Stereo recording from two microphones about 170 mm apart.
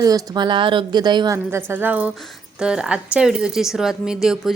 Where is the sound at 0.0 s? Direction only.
20° right (ahead or behind).